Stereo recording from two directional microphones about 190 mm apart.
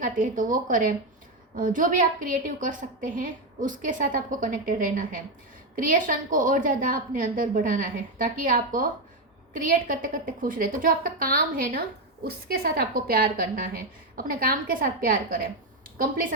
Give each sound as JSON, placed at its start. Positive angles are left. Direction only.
{"t": 0.0, "sound": "a woman's voice", "side_deg": -45}